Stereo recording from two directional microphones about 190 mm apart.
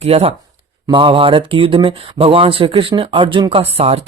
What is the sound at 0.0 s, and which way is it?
Speech, 30° right (ahead or behind).